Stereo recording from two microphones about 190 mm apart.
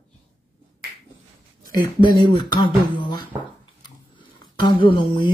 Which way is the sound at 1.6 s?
50° right (ahead or behind).